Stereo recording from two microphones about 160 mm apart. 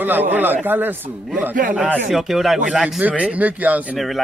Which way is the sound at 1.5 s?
55° right (ahead or behind).